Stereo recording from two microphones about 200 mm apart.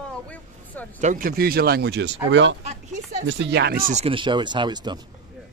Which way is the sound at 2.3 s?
65° right (ahead or behind).